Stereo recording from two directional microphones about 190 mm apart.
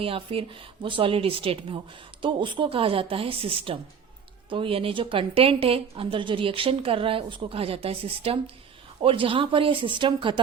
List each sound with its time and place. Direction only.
0.0 s a woman's voice: 30° right (ahead or behind)